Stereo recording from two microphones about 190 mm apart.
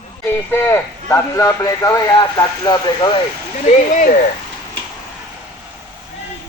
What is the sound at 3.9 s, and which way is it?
Speech, 45° left (ahead or behind).